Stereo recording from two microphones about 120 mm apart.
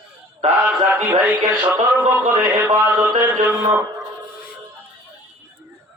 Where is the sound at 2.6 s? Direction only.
20° right (ahead or behind).